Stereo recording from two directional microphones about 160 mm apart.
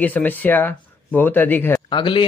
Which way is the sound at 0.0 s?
10° left (ahead or behind).